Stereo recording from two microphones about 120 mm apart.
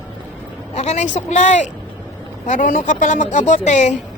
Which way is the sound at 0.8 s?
80° left.